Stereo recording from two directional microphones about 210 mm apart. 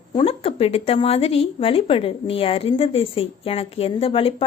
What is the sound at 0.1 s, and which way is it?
A woman's voice, 25° left (ahead or behind).